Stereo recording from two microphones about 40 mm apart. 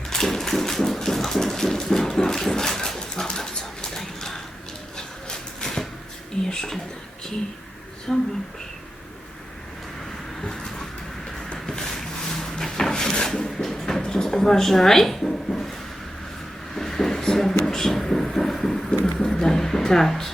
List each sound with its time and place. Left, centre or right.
0.1 s a sound: centre
6.4 s speech: centre
8.1 s speech: centre
10.4 s vehicle: centre
11.5 s wood: centre
16.7 s speech: centre